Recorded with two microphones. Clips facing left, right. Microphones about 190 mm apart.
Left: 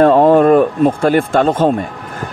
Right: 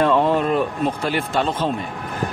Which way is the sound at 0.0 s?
50° left (ahead or behind).